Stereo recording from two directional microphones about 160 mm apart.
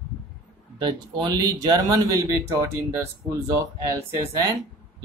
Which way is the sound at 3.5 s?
20° right (ahead or behind).